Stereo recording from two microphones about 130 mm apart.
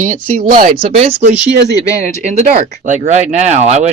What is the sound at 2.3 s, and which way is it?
Speech, 70° right (ahead or behind).